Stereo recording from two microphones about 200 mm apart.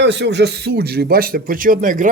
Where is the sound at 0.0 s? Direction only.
60° right (ahead or behind).